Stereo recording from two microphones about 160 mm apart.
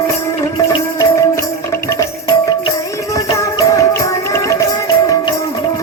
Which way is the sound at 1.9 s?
20° left (ahead or behind).